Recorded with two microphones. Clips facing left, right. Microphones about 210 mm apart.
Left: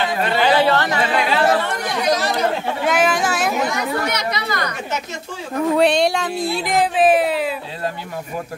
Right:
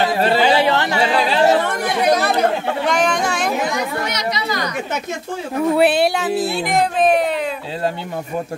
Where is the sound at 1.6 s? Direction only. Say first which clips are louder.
Right 3 dB; 55° right (ahead or behind).